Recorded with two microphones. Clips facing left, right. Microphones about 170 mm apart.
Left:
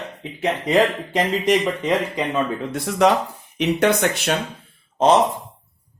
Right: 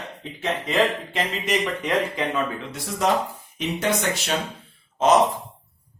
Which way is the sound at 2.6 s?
55° left (ahead or behind).